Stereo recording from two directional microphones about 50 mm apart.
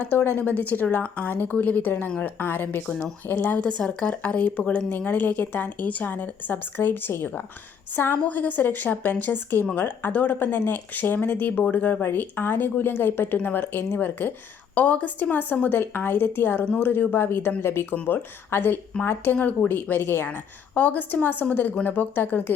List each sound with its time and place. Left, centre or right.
0.0 s a woman's voice: left
3.6 s a woman's voice: centre; by 8.2 s left
8.3 s a woman's voice: left
12.0 s speech: left
14.8 s a woman's voice: left
15.7 s speech: left
18.0 s speech: left
19.3 s a woman's voice: left
20.2 s a woman's voice: left